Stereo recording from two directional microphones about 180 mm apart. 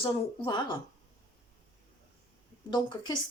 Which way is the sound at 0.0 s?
25° left (ahead or behind).